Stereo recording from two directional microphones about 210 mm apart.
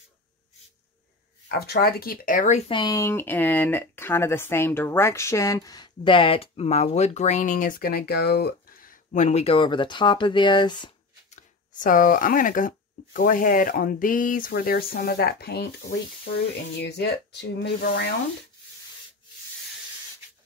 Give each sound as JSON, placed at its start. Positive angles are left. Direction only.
{"t": 1.5, "sound": "speech", "side_deg": 50}
{"t": 2.7, "sound": "speech", "side_deg": 20}
{"t": 11.8, "sound": "speech", "side_deg": 40}